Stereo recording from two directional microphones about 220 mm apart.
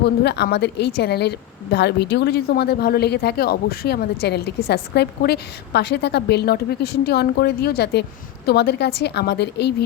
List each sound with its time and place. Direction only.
0.0 s speech: 50° left (ahead or behind)